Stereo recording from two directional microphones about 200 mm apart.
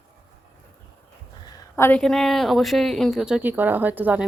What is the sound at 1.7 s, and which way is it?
A woman's voice, 10° left (ahead or behind).